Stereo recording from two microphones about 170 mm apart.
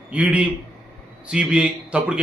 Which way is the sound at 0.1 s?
5° right (ahead or behind).